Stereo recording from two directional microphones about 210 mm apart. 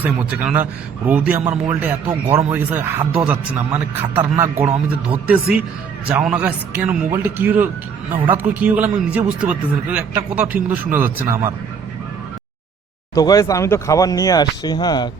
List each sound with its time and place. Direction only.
0.0 s a man's voice: 5° right (ahead or behind)
13.1 s speech: 15° left (ahead or behind)